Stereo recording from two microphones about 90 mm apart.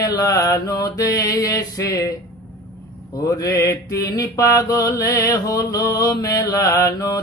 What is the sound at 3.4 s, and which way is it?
Mantra, 40° left (ahead or behind).